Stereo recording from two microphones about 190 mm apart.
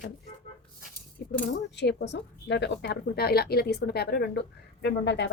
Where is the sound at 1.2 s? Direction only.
55° left (ahead or behind).